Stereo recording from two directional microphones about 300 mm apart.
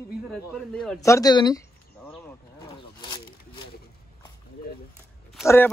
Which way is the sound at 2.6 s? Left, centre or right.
Centre.